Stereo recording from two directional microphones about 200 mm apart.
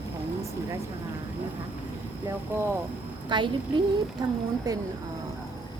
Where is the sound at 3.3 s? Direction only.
25° right (ahead or behind).